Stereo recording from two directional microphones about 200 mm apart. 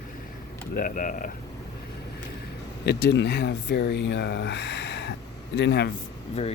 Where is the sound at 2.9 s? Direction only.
60° left (ahead or behind).